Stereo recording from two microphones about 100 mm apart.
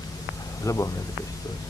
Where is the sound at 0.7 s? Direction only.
35° left (ahead or behind).